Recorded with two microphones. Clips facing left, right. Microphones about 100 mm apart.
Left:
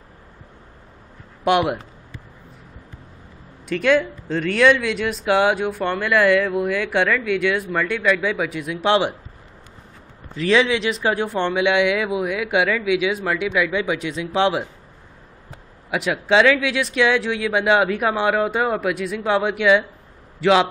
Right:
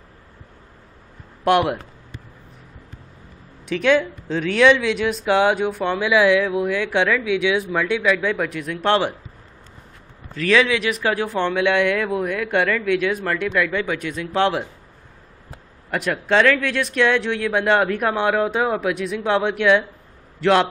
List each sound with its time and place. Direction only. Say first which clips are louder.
1.4 s speech: right 1 dB; centre (ahead or behind)
3.6 s speech: even; centre (ahead or behind)
10.3 s speech: even; 20° left (ahead or behind)
11.2 s speech: even; centre (ahead or behind)
15.9 s speech: left 1 dB; 5° left (ahead or behind)